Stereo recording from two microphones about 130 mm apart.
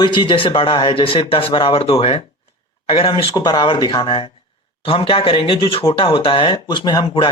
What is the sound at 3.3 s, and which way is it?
Speech, 30° left (ahead or behind).